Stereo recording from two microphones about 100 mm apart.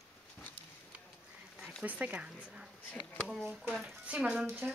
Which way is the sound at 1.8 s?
15° right (ahead or behind).